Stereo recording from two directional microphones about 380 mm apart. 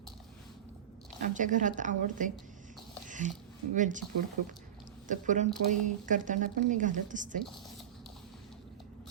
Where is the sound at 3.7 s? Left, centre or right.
Centre.